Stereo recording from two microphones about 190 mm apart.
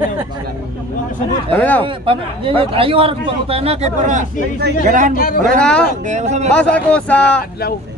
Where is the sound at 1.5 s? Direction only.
10° left (ahead or behind).